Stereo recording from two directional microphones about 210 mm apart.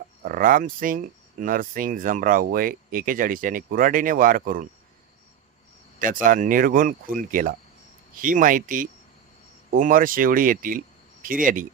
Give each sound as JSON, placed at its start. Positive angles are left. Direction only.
{"t": 0.3, "sound": "speech", "side_deg": -40}
{"t": 6.2, "sound": "speech", "side_deg": -40}